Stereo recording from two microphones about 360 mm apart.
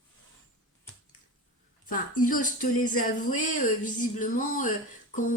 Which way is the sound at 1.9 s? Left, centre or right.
Left.